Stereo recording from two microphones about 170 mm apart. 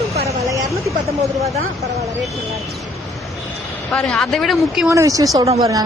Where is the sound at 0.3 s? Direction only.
20° right (ahead or behind).